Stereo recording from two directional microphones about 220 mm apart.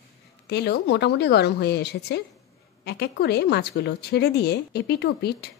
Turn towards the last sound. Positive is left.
turn(degrees=50)  # may be behind; listen again after turning